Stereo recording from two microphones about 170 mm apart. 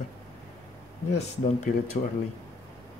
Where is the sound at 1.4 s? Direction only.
40° left (ahead or behind).